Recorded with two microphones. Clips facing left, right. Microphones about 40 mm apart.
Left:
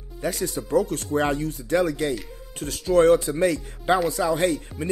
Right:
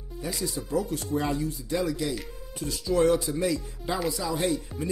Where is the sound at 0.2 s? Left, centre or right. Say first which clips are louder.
Left 5 dB; left.